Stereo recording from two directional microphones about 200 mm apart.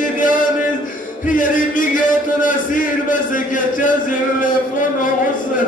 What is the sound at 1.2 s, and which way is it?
A man's voice, 40° left (ahead or behind).